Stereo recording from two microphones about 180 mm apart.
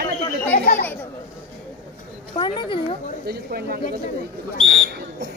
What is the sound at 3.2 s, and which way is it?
Speech, 60° right (ahead or behind).